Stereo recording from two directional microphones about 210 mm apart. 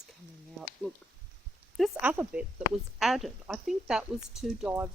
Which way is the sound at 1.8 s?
10° right (ahead or behind).